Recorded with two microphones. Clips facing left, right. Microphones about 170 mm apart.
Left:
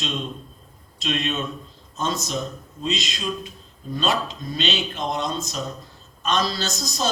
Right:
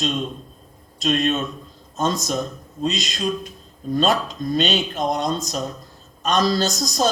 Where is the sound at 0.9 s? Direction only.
45° right (ahead or behind).